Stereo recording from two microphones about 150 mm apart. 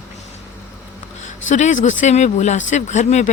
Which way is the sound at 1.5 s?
55° left (ahead or behind).